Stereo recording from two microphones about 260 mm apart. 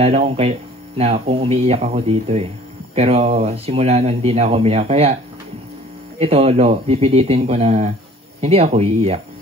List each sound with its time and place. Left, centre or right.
0.0 s speech: right